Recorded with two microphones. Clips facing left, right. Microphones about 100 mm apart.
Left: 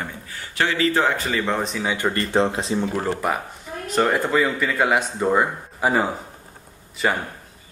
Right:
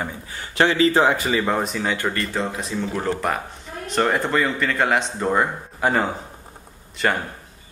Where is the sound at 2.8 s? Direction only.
10° left (ahead or behind).